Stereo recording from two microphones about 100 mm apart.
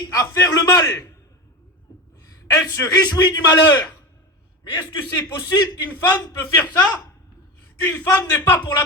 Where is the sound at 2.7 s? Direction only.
40° left (ahead or behind).